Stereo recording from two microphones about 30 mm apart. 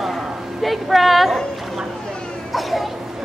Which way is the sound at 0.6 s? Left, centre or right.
Centre.